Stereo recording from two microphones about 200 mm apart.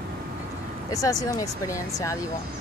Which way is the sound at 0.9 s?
15° left (ahead or behind).